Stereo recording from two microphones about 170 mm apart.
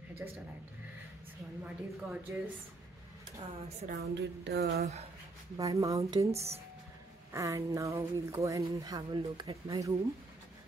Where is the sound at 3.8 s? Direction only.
80° right.